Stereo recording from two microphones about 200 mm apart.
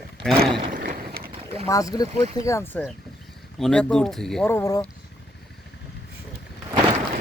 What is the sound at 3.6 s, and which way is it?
Speech, 5° left (ahead or behind).